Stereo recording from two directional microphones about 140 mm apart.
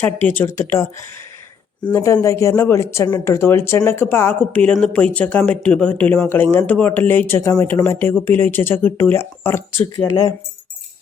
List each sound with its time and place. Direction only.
0.0 s speech: 15° left (ahead or behind)
1.9 s speech: 15° left (ahead or behind)